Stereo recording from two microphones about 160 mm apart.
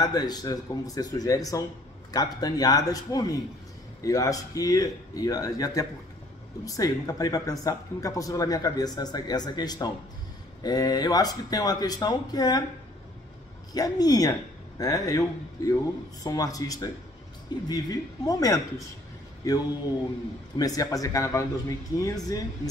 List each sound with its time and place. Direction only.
0.0 s speech: 25° left (ahead or behind)
13.7 s speech: 25° left (ahead or behind)
20.5 s speech: 25° left (ahead or behind)